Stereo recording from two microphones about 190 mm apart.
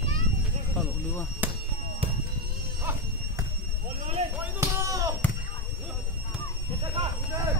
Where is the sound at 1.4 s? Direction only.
10° right (ahead or behind).